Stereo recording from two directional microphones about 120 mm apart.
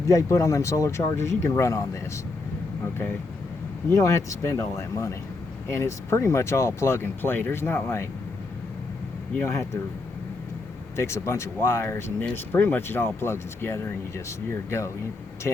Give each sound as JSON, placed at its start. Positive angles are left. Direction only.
{"t": 0.0, "sound": "speech", "side_deg": 25}
{"t": 3.9, "sound": "speech", "side_deg": 25}
{"t": 9.3, "sound": "speech", "side_deg": 20}
{"t": 10.9, "sound": "speech", "side_deg": 25}